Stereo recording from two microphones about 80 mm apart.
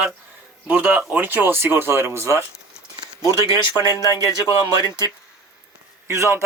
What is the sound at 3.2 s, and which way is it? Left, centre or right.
Speech, right.